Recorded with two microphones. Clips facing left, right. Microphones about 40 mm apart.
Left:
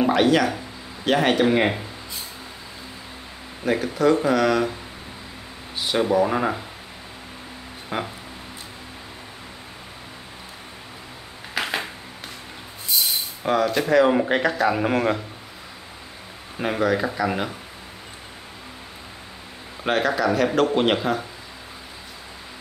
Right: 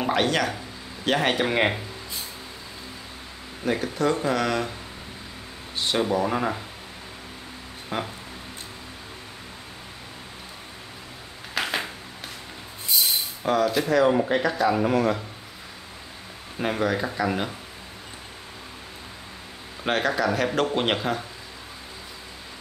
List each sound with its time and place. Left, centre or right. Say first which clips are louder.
0.0 s speech: left 5 dB; centre
3.6 s speech: left 4 dB; centre
5.8 s speech: left 4 dB; centre
7.9 s speech: left 2 dB; centre
11.5 s a sound: left 1 dB; centre
13.4 s speech: left 2 dB; centre
14.1 s speech: left 2 dB; left
16.5 s speech: left 3 dB; centre
19.8 s speech: left 2 dB; centre